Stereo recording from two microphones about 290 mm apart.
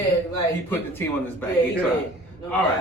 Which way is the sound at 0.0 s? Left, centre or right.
Centre.